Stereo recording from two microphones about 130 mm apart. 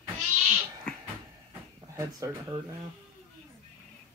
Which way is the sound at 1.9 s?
25° right (ahead or behind).